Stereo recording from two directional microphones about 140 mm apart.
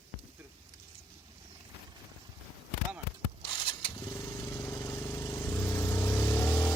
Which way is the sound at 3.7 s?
30° left (ahead or behind).